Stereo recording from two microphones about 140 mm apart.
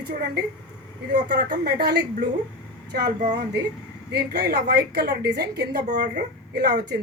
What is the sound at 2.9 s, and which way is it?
Speech, 80° right.